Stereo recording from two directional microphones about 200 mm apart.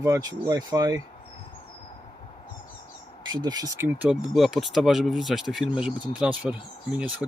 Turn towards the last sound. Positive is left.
turn(degrees=-5)  # may be behind; listen again after turning